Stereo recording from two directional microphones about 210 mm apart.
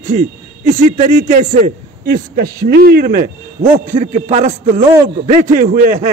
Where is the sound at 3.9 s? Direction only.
35° right (ahead or behind).